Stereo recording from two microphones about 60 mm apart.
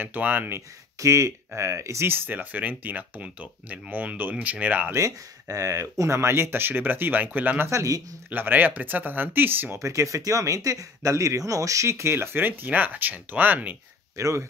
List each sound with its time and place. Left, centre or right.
0.0 s speech: right
0.6 s speech: right
2.0 s speech: right
4.9 s speech: right
7.6 s speech: right
8.3 s speech: right
9.8 s speech: right
14.1 s speech: right